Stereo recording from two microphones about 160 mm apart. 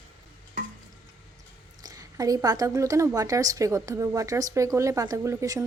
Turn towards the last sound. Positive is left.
turn(degrees=-20)  # may be behind; listen again after turning